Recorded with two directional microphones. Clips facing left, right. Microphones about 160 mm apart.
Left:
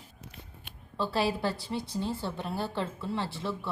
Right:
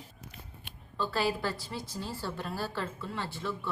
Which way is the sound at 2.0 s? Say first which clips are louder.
Left 2 dB; 20° left (ahead or behind).